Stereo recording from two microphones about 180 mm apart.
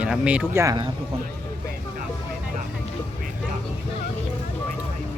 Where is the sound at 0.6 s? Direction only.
20° right (ahead or behind).